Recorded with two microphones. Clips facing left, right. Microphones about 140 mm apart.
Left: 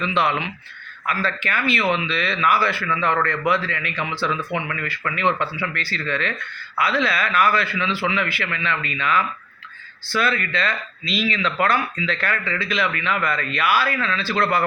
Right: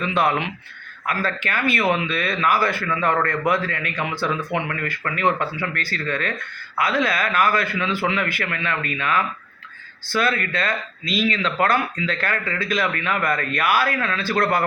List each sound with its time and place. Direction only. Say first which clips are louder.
0.0 s speech: right 1 dB; 50° right (ahead or behind)